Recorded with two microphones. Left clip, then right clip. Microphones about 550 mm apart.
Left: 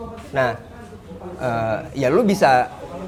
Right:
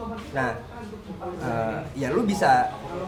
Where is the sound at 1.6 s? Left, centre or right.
Left.